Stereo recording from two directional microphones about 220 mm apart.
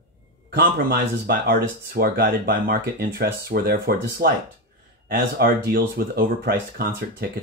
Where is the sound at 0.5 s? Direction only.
45° right (ahead or behind).